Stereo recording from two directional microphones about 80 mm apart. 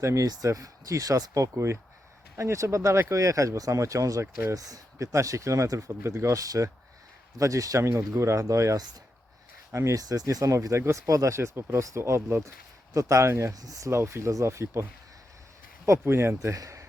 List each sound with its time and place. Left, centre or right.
0.0 s speech: right
13.5 s speech: right
15.9 s speech: right